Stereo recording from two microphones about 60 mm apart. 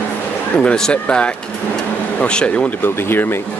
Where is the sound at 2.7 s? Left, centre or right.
Left.